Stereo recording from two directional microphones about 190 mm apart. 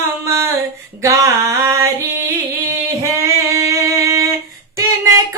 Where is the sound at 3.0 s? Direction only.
15° right (ahead or behind).